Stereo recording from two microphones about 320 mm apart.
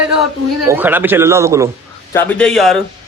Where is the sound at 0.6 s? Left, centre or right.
Centre.